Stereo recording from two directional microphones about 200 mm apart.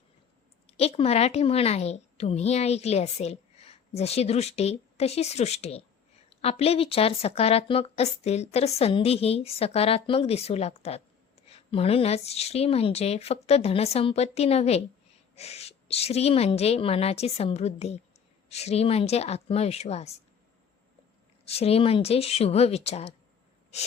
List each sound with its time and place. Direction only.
0.7 s a woman's voice: 30° left (ahead or behind)
21.4 s a woman's voice: 30° left (ahead or behind)